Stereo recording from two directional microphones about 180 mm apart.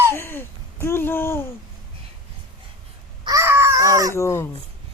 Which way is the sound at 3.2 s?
15° right (ahead or behind).